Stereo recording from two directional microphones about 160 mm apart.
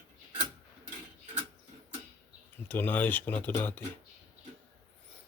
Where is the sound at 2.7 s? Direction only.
10° left (ahead or behind).